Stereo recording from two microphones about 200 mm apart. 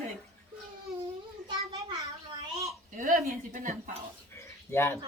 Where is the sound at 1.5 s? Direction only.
25° right (ahead or behind).